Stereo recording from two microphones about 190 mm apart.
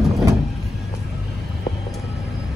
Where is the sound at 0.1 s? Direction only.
15° right (ahead or behind).